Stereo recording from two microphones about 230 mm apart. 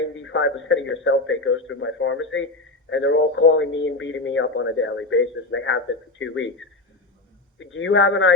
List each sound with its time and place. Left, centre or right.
0.2 s a man's voice: left
7.6 s a man's voice: left